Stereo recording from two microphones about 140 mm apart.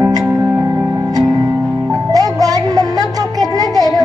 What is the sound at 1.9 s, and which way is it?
Music, 25° right (ahead or behind).